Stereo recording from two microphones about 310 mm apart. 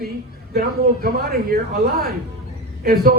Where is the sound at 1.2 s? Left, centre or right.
Right.